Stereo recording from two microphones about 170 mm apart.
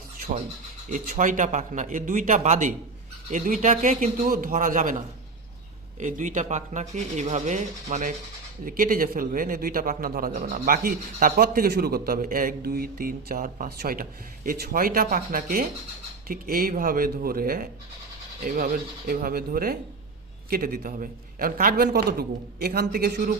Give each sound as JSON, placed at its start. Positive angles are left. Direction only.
{"t": 0.2, "sound": "a sound", "side_deg": -45}
{"t": 0.9, "sound": "speech", "side_deg": -45}
{"t": 8.6, "sound": "a man's voice", "side_deg": -55}